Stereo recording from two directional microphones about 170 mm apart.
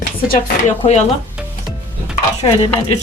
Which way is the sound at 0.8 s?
40° left (ahead or behind).